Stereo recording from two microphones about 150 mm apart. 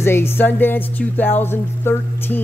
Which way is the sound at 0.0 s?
15° left (ahead or behind).